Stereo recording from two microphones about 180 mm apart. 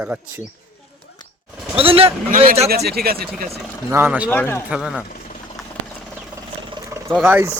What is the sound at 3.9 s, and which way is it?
Speech, 10° right (ahead or behind).